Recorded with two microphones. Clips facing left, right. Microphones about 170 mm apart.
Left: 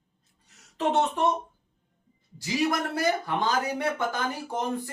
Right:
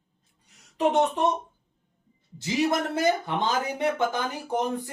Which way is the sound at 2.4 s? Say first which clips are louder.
Right 2 dB; 25° right (ahead or behind).